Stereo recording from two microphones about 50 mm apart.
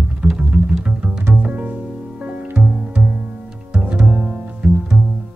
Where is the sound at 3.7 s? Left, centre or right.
Right.